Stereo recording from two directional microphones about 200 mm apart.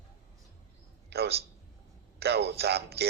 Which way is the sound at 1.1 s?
55° right (ahead or behind).